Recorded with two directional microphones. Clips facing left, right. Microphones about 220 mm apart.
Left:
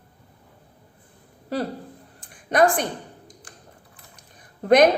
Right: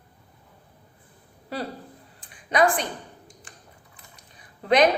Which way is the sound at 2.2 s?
50° left (ahead or behind).